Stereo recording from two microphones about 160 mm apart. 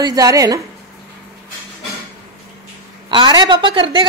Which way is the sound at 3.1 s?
30° right (ahead or behind).